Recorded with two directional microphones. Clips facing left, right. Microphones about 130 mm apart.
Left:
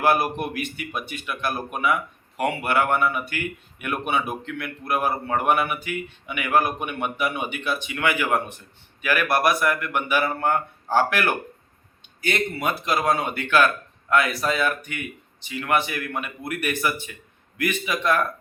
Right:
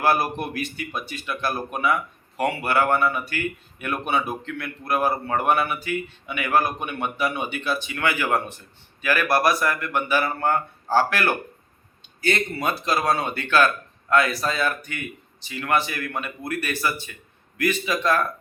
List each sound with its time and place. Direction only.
0.0 s speech: 20° left (ahead or behind)
12.8 s speech: 15° left (ahead or behind)